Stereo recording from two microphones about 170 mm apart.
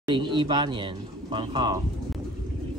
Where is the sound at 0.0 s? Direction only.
25° right (ahead or behind).